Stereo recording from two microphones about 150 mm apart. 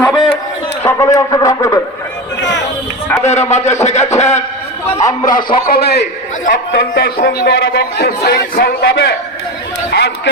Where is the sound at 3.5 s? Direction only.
50° left (ahead or behind).